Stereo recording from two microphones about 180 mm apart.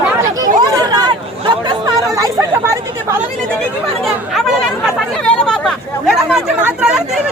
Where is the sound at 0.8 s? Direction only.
20° right (ahead or behind).